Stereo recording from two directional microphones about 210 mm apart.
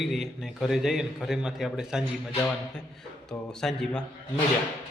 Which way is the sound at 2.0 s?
10° left (ahead or behind).